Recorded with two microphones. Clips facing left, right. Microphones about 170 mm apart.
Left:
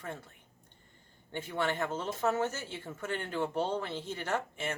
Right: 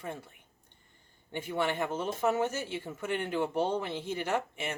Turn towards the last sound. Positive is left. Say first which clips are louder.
# right 2 dB
turn(degrees=-15)  # may be behind; listen again after turning